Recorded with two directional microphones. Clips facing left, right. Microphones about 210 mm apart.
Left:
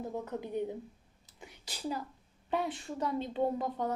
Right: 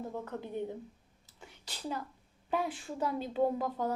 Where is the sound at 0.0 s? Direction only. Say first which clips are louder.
Left 2 dB; 15° left (ahead or behind).